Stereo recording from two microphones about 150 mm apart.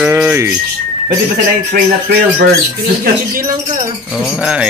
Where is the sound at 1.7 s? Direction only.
90° right.